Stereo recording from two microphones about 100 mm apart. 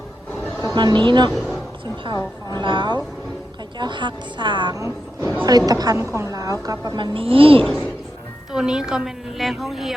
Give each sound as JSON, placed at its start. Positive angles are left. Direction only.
{"t": 0.6, "sound": "a woman's voice", "side_deg": -40}
{"t": 1.3, "sound": "a sound", "side_deg": 0}
{"t": 2.5, "sound": "a woman's voice", "side_deg": -50}
{"t": 4.7, "sound": "a woman's voice", "side_deg": -30}
{"t": 7.0, "sound": "a woman's voice", "side_deg": -65}
{"t": 8.5, "sound": "a woman's voice", "side_deg": -10}